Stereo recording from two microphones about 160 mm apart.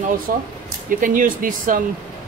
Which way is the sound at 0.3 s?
60° right (ahead or behind).